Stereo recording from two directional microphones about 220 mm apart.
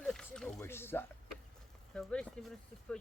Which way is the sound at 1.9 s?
5° left (ahead or behind).